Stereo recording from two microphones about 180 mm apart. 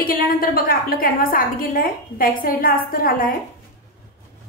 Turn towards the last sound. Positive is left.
turn(degrees=50)  # may be behind; listen again after turning